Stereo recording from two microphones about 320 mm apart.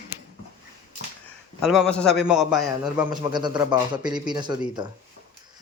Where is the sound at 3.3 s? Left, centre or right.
Centre.